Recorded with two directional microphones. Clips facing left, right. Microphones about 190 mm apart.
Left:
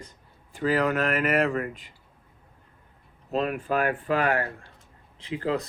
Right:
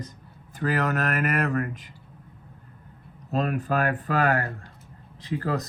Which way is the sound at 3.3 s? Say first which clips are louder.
Even; 40° right (ahead or behind).